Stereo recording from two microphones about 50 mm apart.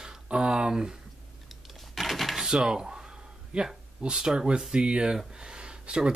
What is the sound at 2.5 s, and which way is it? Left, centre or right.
Speech, centre.